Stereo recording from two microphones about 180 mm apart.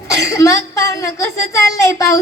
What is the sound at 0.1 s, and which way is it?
A woman's voice, 15° left (ahead or behind).